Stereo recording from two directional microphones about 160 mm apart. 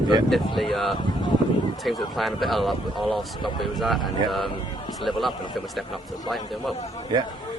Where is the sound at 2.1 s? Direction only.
Centre (ahead or behind).